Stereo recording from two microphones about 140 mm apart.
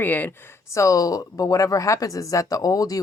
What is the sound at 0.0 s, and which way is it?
Speech, 15° left (ahead or behind).